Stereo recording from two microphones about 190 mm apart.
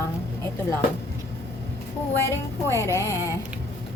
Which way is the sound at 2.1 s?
15° left (ahead or behind).